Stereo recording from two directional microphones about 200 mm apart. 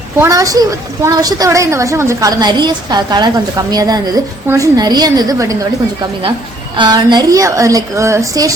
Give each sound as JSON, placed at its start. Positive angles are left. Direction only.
{"t": 0.2, "sound": "a woman's voice", "side_deg": -15}
{"t": 6.7, "sound": "a woman's voice", "side_deg": -20}